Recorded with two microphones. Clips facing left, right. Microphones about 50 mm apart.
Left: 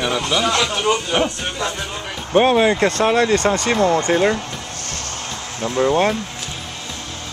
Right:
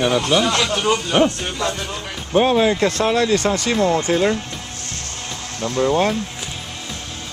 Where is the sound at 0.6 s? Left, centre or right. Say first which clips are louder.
Even; centre.